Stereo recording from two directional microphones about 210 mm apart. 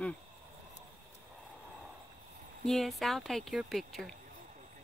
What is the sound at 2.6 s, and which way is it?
Speech, centre (ahead or behind).